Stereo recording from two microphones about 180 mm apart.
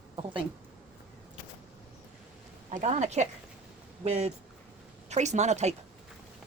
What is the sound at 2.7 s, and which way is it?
Speech, 40° right (ahead or behind).